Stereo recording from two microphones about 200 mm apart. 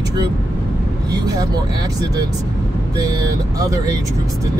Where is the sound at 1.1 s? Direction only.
20° right (ahead or behind).